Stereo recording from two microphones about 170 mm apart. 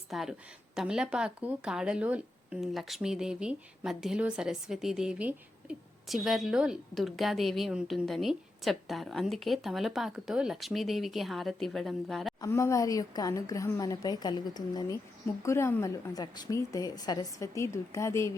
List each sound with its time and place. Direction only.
0.1 s speech: centre (ahead or behind)
12.4 s a woman's voice: 15° left (ahead or behind)